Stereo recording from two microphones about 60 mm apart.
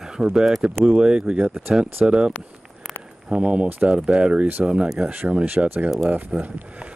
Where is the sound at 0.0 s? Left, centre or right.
Centre; by 5.9 s right.